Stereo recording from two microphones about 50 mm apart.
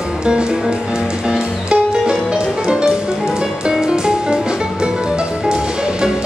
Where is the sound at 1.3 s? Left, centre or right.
Centre.